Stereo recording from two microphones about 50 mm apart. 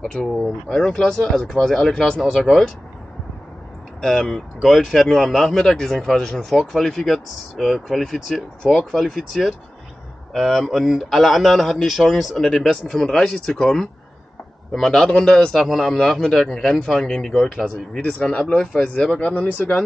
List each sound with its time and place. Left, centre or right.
0.0 s speech: centre
2.4 s a man's voice: centre
4.0 s speech: centre
4.6 s speech: centre
5.1 s a man's voice: centre
12.4 s speech: centre
14.7 s a man's voice: centre
18.1 s speech: left
19.1 s speech: left